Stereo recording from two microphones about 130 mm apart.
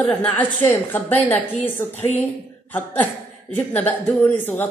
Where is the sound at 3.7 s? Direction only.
10° left (ahead or behind).